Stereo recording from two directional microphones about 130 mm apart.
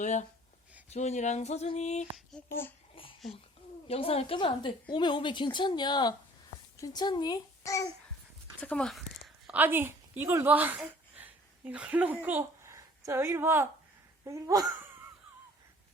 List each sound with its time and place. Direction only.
0.0 s speech: 70° left (ahead or behind)
0.9 s a sound: 60° left (ahead or behind)
2.4 s a child's voice: 10° left (ahead or behind)
2.9 s a sound: 45° left (ahead or behind)
3.8 s a woman's voice: 50° left (ahead or behind); by 7.9 s 25° left (ahead or behind)
8.6 s speech: 5° left (ahead or behind)
9.5 s a woman's voice: 15° right (ahead or behind)
10.8 s a sound: 10° right (ahead or behind)
14.3 s speech: 25° right (ahead or behind)